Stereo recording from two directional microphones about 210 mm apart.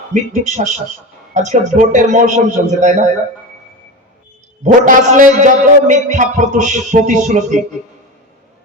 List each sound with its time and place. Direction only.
0.1 s a man's voice: 35° right (ahead or behind)
4.6 s a man's voice: 35° right (ahead or behind)